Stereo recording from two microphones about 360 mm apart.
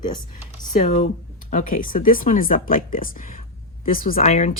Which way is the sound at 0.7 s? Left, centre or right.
Left.